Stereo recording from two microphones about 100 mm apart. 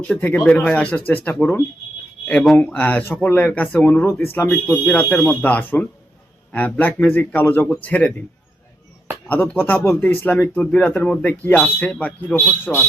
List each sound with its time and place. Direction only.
0.1 s speech: 15° left (ahead or behind)
9.3 s speech: 20° left (ahead or behind)